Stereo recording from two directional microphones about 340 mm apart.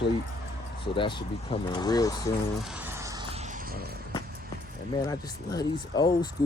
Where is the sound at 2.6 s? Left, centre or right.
Centre; by 3.9 s right.